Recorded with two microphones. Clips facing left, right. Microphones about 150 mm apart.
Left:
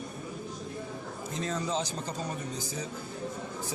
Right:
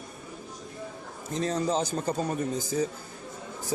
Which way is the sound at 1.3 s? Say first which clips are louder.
Right 5 dB; 35° right (ahead or behind).